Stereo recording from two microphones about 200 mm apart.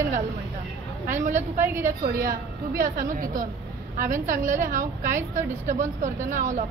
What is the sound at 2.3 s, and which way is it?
A woman's voice, 45° right (ahead or behind).